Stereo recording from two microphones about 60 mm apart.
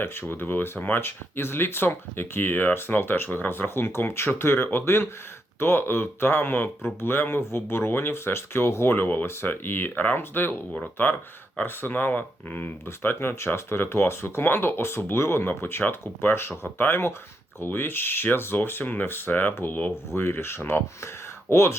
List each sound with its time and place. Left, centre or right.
0.0 s speech: left
9.0 s speech: left
20.1 s speech: left